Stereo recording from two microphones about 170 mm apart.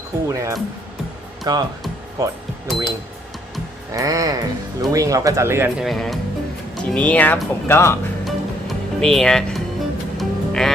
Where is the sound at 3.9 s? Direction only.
20° right (ahead or behind).